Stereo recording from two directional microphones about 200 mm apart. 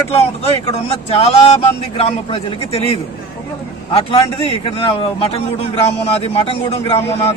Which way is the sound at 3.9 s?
30° left (ahead or behind).